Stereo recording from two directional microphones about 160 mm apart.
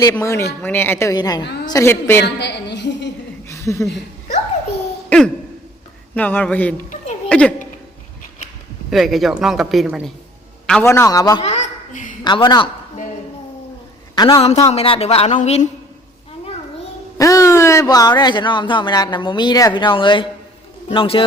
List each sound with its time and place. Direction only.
0.1 s a woman's voice: 20° left (ahead or behind)
2.2 s a woman's voice: 90° left
3.5 s a sound: 20° left (ahead or behind)
5.0 s a sound: 5° left (ahead or behind)
6.1 s a woman's voice: 10° left (ahead or behind)
6.9 s a sound: 45° left (ahead or behind)
7.3 s a woman's voice: 5° left (ahead or behind)
8.9 s a man's voice: centre (ahead or behind)
10.8 s speech: 20° left (ahead or behind)
11.4 s a sound: 45° left (ahead or behind)
12.2 s speech: 25° left (ahead or behind)
14.2 s a man's voice: 35° left (ahead or behind)
17.2 s a man's voice: 20° left (ahead or behind)